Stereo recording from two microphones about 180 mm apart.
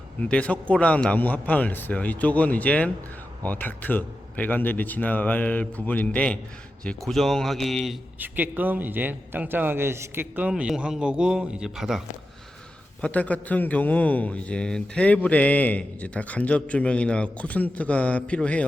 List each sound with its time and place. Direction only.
0.2 s a man's voice: 5° left (ahead or behind)
8.2 s a man's voice: 10° right (ahead or behind); by 18.6 s 5° left (ahead or behind)